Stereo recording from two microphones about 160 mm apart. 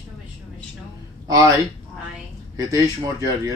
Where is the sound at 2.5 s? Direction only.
20° right (ahead or behind).